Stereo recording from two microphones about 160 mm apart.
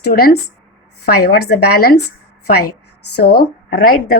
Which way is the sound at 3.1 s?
80° left.